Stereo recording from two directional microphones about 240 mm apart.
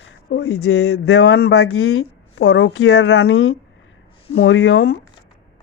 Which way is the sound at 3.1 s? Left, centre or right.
Left.